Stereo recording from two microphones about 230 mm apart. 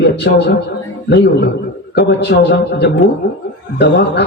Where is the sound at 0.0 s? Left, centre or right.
Left.